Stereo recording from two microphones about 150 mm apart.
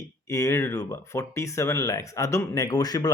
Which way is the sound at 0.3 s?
20° left (ahead or behind).